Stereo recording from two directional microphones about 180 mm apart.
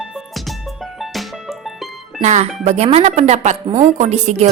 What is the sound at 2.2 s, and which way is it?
Speech, 40° right (ahead or behind).